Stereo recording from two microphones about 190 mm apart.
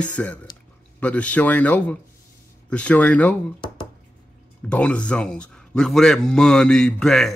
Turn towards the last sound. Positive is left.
turn(degrees=0)  # may be behind; listen again after turning